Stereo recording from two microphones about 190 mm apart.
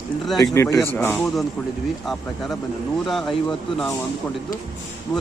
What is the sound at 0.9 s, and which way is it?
Speech, 5° left (ahead or behind).